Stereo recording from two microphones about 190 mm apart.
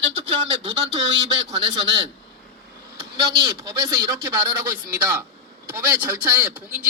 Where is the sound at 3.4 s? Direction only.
20° right (ahead or behind).